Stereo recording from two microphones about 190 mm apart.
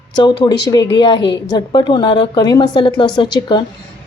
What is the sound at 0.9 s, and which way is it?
A woman's voice, 25° left (ahead or behind).